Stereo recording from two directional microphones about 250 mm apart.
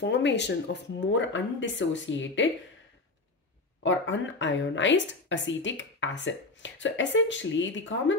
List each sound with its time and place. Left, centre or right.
0.0 s speech: left
3.8 s speech: left